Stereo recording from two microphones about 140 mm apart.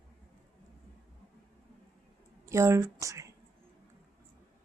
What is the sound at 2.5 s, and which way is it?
Speech, 20° right (ahead or behind).